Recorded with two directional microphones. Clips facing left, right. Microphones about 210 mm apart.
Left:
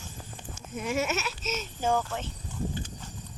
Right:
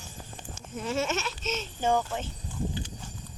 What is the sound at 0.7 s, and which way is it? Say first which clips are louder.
Speech: even; 10° left (ahead or behind).